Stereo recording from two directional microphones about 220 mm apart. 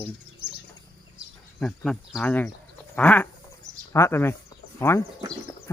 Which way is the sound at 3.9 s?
10° left (ahead or behind).